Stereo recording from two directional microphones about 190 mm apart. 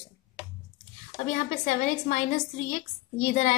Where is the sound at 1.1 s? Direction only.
40° left (ahead or behind).